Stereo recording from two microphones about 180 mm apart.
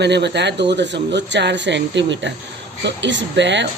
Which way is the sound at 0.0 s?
70° right (ahead or behind).